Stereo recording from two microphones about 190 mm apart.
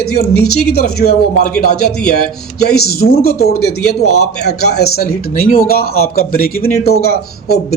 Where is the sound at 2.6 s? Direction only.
55° left (ahead or behind).